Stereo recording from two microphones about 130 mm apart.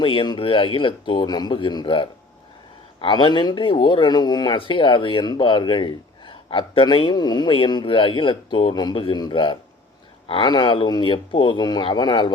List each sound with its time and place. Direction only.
0.0 s speech: 40° left (ahead or behind)